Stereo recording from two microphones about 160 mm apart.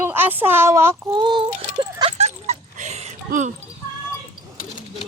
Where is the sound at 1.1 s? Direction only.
30° right (ahead or behind); by 3.5 s 45° right (ahead or behind).